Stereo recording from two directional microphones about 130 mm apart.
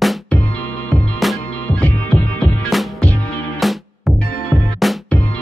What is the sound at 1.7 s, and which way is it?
Music, 15° left (ahead or behind).